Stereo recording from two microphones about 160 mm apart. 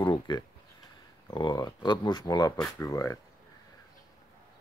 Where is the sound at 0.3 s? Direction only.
30° left (ahead or behind).